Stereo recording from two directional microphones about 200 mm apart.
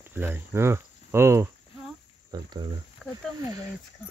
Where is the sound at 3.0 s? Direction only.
5° left (ahead or behind).